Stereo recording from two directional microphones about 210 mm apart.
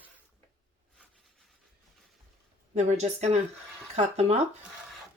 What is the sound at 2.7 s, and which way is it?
A woman's voice, 35° right (ahead or behind).